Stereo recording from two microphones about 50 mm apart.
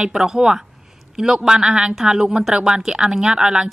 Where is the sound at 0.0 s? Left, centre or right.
Centre.